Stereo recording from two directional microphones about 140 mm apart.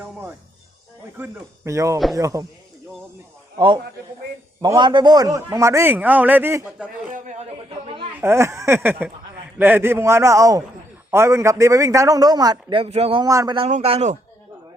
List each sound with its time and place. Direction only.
0.0 s a man's voice: 15° right (ahead or behind)
4.6 s a man's voice: 35° right (ahead or behind); by 6.7 s 15° right (ahead or behind)
6.7 s speech: 5° right (ahead or behind)
7.1 s a man's voice: 60° right (ahead or behind)
7.7 s speech: 40° right (ahead or behind)
8.2 s a man's voice: 20° right (ahead or behind)
12.8 s speech: 45° right (ahead or behind)
13.2 s a man's voice: 25° right (ahead or behind)
13.7 s a man's voice: 55° right (ahead or behind)